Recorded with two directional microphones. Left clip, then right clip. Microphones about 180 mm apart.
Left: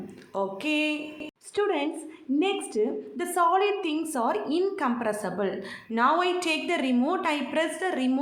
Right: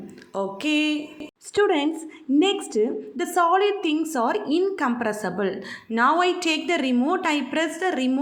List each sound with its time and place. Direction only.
0.3 s a woman's voice: 25° right (ahead or behind)